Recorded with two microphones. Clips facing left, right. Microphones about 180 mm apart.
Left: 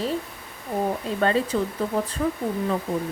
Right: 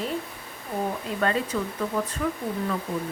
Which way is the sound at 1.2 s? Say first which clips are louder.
Left 4 dB; 30° left (ahead or behind).